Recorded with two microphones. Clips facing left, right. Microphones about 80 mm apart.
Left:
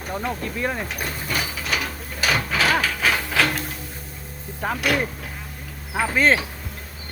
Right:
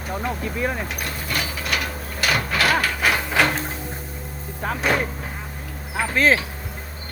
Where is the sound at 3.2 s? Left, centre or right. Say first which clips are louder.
Right 2 dB; centre.